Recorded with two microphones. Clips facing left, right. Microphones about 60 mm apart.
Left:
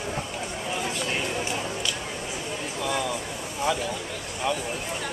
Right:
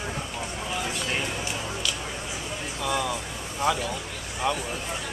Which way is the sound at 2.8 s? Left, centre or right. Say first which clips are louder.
Right 1 dB; centre.